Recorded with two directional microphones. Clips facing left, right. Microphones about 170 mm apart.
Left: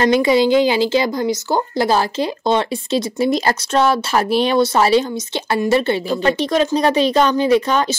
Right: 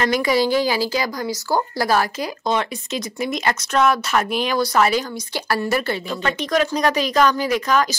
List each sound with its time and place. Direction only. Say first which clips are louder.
0.0 s speech: left 5 dB; 25° left (ahead or behind)